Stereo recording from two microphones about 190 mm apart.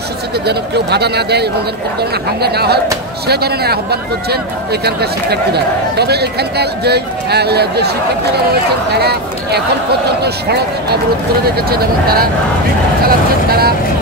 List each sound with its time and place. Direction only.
0.5 s speech: 60° right (ahead or behind)
8.9 s speech: 60° right (ahead or behind)